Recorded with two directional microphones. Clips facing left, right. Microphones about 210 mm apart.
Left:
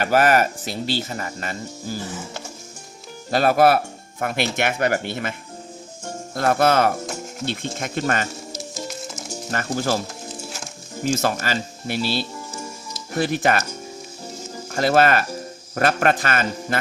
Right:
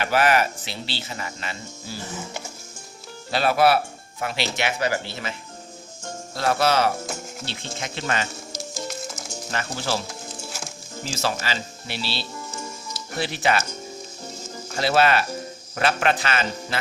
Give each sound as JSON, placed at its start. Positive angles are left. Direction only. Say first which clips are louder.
{"t": 0.0, "sound": "speech", "louder": "left 3 dB", "side_deg": 45}
{"t": 3.3, "sound": "speech", "louder": "left 3 dB", "side_deg": 45}
{"t": 6.3, "sound": "speech", "louder": "left 3 dB", "side_deg": 50}
{"t": 9.3, "sound": "speech", "louder": "left 6 dB", "side_deg": 45}
{"t": 11.1, "sound": "speech", "louder": "left 4 dB", "side_deg": 50}
{"t": 14.7, "sound": "speech", "louder": "left 3 dB", "side_deg": 50}